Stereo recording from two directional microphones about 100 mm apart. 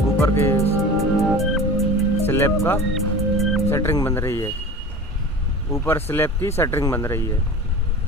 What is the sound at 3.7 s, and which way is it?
Speech, 25° left (ahead or behind).